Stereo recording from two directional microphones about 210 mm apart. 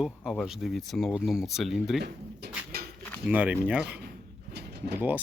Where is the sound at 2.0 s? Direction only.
50° right (ahead or behind).